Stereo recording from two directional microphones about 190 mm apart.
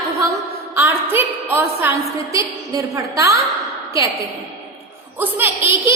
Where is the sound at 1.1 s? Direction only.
10° right (ahead or behind).